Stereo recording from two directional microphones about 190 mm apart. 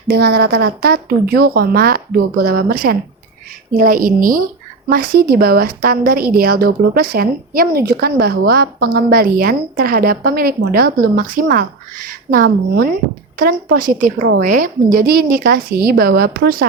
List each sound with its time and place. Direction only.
0.1 s a woman's voice: 55° right (ahead or behind)